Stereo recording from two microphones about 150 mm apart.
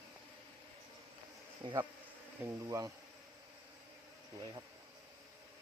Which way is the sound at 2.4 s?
20° right (ahead or behind).